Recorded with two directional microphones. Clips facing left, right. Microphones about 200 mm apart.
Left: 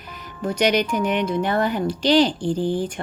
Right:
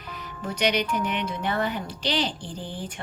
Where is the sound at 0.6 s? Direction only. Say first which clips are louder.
Left 5 dB; 45° left (ahead or behind).